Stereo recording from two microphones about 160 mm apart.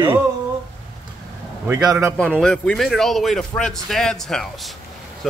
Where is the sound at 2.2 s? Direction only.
5° left (ahead or behind).